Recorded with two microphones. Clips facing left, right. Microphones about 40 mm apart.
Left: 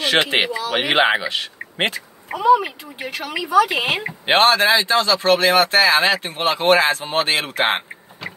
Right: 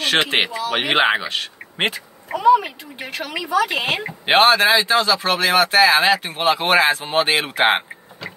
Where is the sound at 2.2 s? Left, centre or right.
Centre.